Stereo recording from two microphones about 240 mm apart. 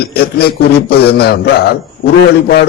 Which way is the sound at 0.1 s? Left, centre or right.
Left.